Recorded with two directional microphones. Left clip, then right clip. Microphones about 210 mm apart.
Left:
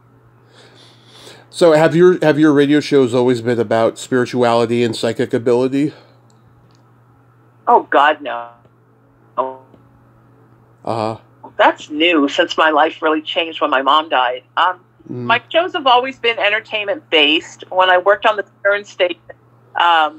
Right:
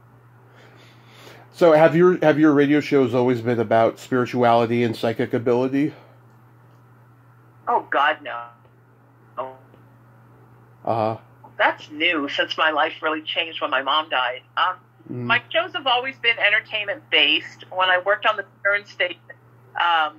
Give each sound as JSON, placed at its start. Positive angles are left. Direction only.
{"t": 1.2, "sound": "speech", "side_deg": 35}
{"t": 7.6, "sound": "speech", "side_deg": 40}
{"t": 10.8, "sound": "speech", "side_deg": 35}